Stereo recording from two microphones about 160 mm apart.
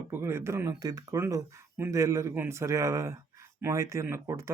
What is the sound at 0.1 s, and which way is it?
Speech, 15° right (ahead or behind).